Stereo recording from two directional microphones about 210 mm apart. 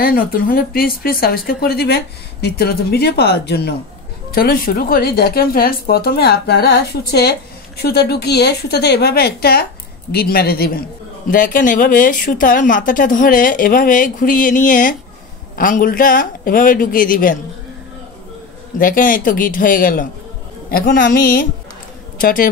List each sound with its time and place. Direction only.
0.0 s a woman's voice: 45° left (ahead or behind)
18.8 s a man's voice: 40° left (ahead or behind)